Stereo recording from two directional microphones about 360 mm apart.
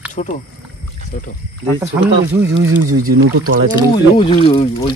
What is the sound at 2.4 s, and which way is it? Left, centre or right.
Speech, right.